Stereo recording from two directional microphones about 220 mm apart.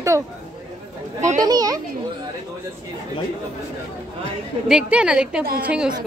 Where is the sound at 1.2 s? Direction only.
35° right (ahead or behind).